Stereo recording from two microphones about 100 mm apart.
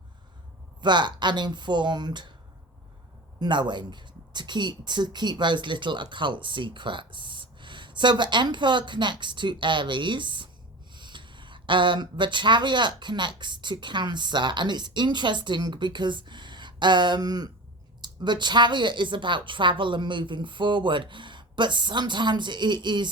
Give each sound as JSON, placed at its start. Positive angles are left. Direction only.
{"t": 0.8, "sound": "speech", "side_deg": -50}
{"t": 3.4, "sound": "speech", "side_deg": -50}